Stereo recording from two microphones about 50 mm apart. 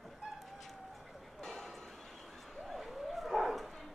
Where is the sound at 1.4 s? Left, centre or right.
Centre.